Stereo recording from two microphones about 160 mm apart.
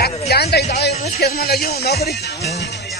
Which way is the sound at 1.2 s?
70° left (ahead or behind).